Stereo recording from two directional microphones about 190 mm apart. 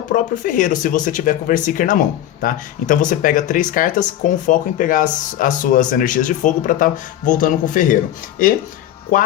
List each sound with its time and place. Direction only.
0.1 s speech: 45° left (ahead or behind)